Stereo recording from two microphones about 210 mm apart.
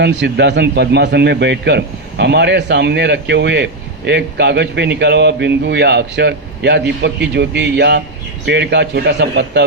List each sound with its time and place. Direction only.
0.0 s a man's voice: 55° right (ahead or behind)